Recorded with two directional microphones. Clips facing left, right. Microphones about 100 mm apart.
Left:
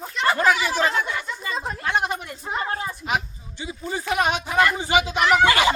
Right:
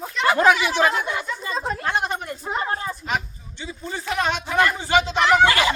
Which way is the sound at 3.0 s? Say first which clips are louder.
Left 1 dB; 10° left (ahead or behind).